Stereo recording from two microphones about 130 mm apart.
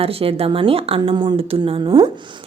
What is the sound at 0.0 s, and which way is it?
A woman's voice, 45° right (ahead or behind).